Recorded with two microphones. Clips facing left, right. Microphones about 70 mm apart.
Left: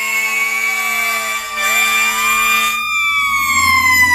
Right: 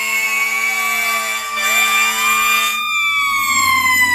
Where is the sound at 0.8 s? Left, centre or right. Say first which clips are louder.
Even; centre.